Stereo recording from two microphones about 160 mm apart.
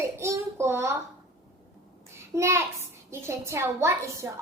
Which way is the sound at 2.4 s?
15° right (ahead or behind).